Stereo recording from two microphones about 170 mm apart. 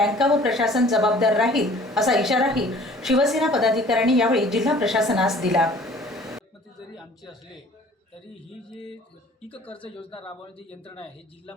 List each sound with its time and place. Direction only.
0.0 s a woman's voice: centre (ahead or behind)
6.0 s a sound: centre (ahead or behind)
9.6 s speech: 10° left (ahead or behind)
10.0 s a man's voice: 30° left (ahead or behind)